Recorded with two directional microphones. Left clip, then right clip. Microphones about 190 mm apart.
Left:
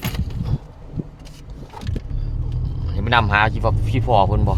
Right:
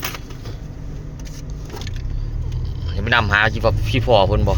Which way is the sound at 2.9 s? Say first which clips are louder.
Even; 10° left (ahead or behind).